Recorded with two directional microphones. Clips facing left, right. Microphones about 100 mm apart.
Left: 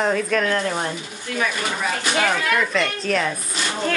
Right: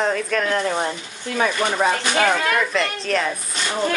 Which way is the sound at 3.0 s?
Centre (ahead or behind).